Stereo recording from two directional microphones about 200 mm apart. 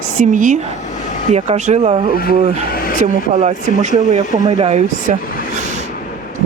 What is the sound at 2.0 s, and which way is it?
Speech, 50° left (ahead or behind).